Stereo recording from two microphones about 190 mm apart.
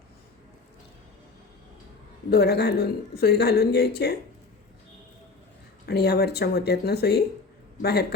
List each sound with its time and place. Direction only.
2.3 s speech: 55° left (ahead or behind)
5.8 s speech: 60° left (ahead or behind)